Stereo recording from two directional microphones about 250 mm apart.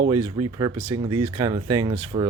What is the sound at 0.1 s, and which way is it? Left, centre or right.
Speech, centre.